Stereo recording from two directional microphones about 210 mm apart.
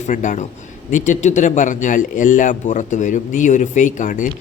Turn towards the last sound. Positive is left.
turn(degrees=40)  # may be behind; listen again after turning